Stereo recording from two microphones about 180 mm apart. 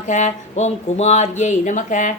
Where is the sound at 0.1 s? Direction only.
40° left (ahead or behind).